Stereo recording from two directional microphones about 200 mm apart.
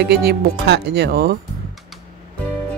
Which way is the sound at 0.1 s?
55° right (ahead or behind).